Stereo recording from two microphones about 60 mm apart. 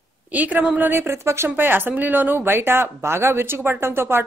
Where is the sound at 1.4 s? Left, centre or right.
Right.